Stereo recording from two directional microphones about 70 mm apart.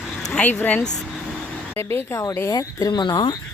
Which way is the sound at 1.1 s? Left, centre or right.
Centre.